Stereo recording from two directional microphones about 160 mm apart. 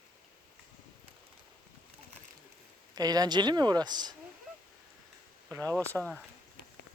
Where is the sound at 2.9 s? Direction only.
25° right (ahead or behind).